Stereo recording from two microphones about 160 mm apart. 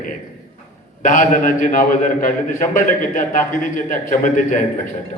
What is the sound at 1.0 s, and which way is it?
A man's voice, 55° left (ahead or behind).